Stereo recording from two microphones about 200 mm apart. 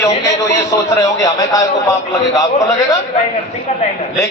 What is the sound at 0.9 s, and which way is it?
A man's voice, 15° left (ahead or behind).